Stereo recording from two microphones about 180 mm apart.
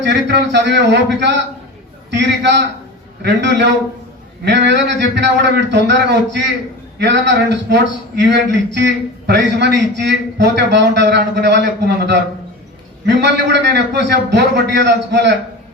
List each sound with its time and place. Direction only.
0.0 s a man's voice: 75° right (ahead or behind)